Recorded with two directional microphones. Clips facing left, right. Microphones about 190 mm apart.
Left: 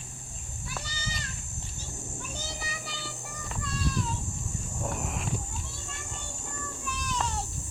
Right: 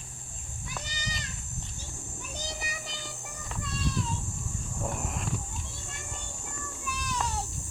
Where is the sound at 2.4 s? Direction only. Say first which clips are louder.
Even; 20° right (ahead or behind).